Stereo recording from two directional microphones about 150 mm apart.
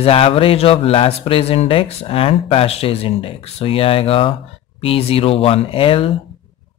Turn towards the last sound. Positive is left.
turn(degrees=35)  # may be behind; listen again after turning